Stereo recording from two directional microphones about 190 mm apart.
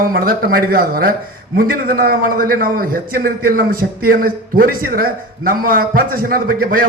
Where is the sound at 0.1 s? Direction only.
50° right (ahead or behind).